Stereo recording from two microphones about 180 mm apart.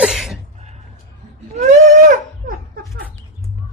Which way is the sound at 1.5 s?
45° right (ahead or behind).